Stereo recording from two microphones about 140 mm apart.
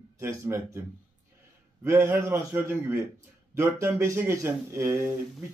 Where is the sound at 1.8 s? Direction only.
15° right (ahead or behind).